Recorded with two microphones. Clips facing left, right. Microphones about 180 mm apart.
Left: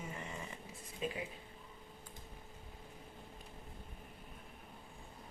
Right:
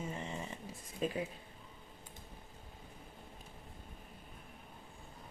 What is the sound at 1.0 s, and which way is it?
Speech, 40° right (ahead or behind).